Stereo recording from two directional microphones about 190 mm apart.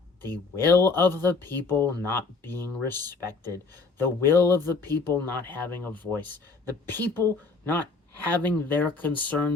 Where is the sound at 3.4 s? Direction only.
20° right (ahead or behind).